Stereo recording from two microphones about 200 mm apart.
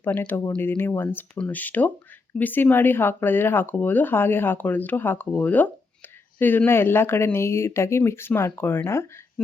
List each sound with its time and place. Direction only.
0.0 s speech: 10° left (ahead or behind)